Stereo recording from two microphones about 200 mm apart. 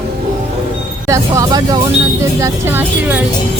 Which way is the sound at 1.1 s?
15° right (ahead or behind).